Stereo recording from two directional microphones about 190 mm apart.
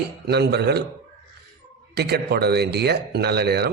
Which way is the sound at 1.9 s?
60° right (ahead or behind).